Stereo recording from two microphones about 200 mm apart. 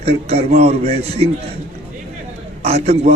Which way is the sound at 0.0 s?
30° right (ahead or behind).